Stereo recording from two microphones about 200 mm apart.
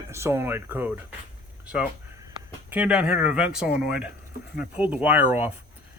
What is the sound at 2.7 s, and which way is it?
Speech, 5° right (ahead or behind).